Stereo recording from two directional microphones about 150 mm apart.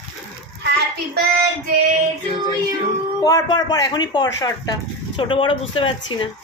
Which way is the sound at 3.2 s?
25° left (ahead or behind).